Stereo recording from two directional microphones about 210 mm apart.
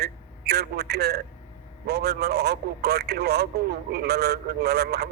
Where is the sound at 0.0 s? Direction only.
50° right (ahead or behind).